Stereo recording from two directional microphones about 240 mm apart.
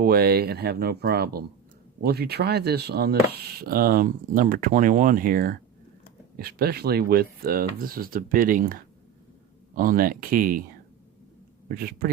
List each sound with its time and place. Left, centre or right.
0.0 s speech: right
11.7 s speech: right